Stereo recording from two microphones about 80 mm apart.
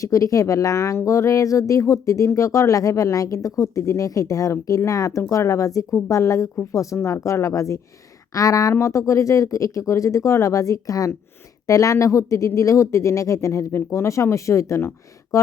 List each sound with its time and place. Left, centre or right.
0.0 s speech: left